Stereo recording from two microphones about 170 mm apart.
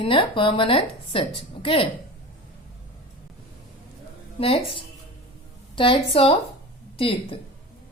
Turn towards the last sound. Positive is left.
turn(degrees=35)  # may be behind; listen again after turning